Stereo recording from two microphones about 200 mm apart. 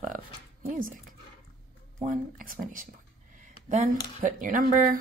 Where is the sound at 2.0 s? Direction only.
45° right (ahead or behind).